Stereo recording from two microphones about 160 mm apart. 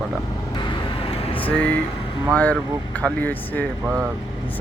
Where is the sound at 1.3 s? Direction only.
10° left (ahead or behind).